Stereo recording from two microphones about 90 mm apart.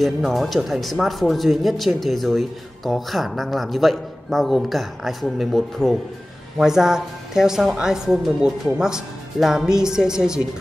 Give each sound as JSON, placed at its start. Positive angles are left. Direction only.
{"t": 0.0, "sound": "a woman's voice", "side_deg": 0}